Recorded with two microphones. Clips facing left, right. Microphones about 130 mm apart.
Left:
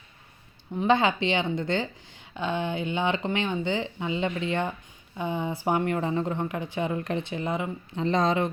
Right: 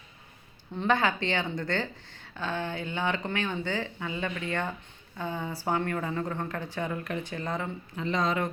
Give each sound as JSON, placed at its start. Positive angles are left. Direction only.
{"t": 0.8, "sound": "speech", "side_deg": 20}
{"t": 7.9, "sound": "speech", "side_deg": 35}